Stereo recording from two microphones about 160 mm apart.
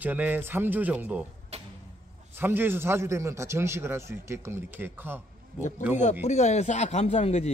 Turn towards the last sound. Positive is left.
turn(degrees=45)  # may be behind; listen again after turning